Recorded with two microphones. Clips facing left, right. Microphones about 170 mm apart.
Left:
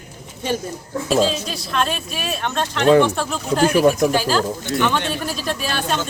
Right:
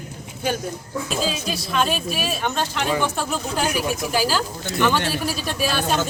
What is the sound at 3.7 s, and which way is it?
Speech, 55° left (ahead or behind).